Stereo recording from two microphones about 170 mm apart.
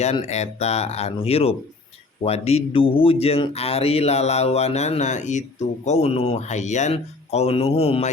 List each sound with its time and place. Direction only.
0.0 s speech: 40° left (ahead or behind)